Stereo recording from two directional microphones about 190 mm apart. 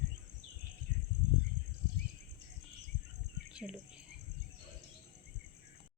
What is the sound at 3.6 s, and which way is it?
Cricket, 5° right (ahead or behind).